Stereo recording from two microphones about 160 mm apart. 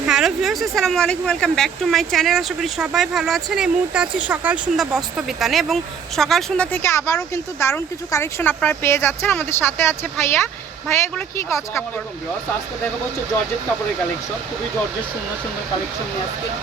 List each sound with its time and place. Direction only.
0.1 s speech: 5° right (ahead or behind); by 11.9 s 15° left (ahead or behind)